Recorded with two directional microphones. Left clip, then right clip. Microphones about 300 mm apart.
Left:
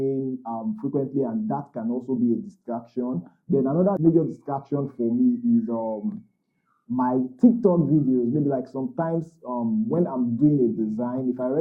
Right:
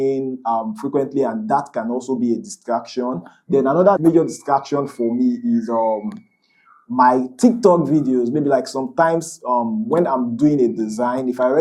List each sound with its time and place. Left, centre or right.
0.0 s speech: centre
9.5 s speech: right
9.9 s speech: centre